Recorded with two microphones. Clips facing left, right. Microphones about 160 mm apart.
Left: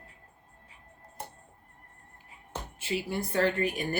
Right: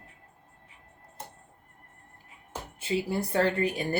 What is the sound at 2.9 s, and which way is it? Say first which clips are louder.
Speech: right 3 dB; 30° right (ahead or behind).